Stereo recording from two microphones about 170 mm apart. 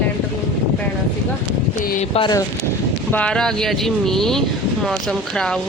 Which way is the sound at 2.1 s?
30° left (ahead or behind).